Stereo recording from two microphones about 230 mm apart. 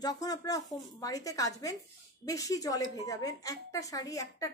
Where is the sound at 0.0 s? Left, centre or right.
Centre.